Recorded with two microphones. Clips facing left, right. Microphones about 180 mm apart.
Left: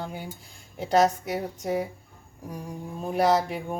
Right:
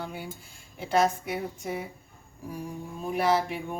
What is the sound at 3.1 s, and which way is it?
Speech, 40° left (ahead or behind).